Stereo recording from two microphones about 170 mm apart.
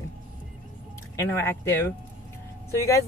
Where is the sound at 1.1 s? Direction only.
15° left (ahead or behind).